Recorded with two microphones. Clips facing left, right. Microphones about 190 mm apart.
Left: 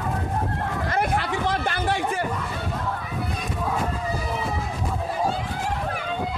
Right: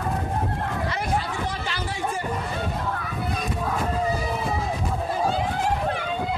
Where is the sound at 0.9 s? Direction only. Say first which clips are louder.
Left 3 dB; 60° left (ahead or behind).